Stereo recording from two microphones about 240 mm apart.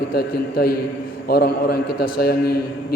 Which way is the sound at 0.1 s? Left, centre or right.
Left.